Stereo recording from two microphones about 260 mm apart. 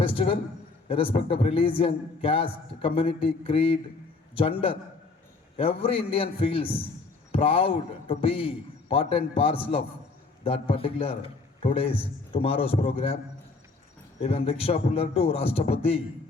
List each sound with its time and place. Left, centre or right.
0.0 s a man's voice: left
14.2 s a man's voice: left